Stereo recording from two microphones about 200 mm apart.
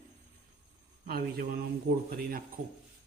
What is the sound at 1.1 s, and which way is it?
Speech, 50° right (ahead or behind).